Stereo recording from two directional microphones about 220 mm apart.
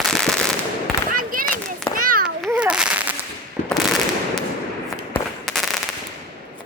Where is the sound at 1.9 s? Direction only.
40° right (ahead or behind).